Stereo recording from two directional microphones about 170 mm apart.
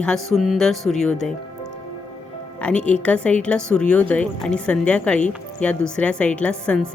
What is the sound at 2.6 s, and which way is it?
A woman's voice, 5° left (ahead or behind).